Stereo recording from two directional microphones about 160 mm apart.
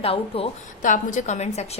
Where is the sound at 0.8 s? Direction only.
55° left (ahead or behind).